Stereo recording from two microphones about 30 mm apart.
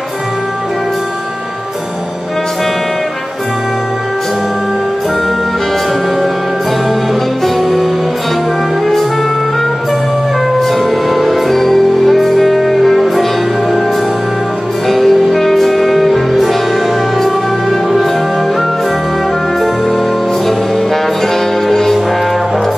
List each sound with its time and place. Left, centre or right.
7.4 s music: centre
10.6 s music: centre
15.0 s music: centre
19.6 s music: centre